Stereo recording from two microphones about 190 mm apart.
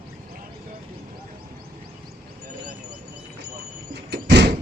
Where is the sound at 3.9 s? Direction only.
60° right (ahead or behind).